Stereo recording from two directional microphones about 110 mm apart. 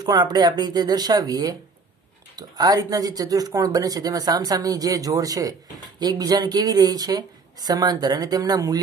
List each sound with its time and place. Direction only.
0.0 s speech: 35° right (ahead or behind)